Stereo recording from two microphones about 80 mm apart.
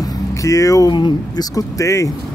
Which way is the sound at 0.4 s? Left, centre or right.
Left.